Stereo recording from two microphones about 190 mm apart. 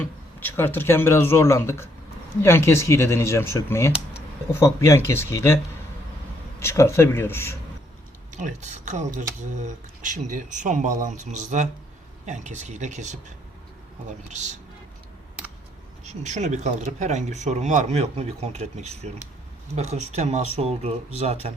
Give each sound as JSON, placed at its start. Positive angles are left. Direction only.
{"t": 0.0, "sound": "speech", "side_deg": 10}
{"t": 6.6, "sound": "speech", "side_deg": 15}
{"t": 8.3, "sound": "a woman's voice", "side_deg": -40}
{"t": 14.3, "sound": "speech", "side_deg": -40}
{"t": 16.0, "sound": "speech", "side_deg": -40}